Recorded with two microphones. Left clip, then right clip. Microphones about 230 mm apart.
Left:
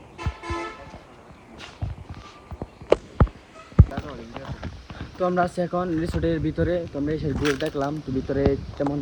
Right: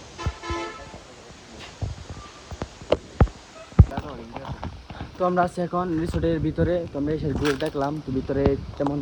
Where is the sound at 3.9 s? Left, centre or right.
Centre.